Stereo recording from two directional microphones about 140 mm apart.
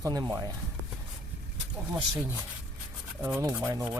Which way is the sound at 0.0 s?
25° right (ahead or behind).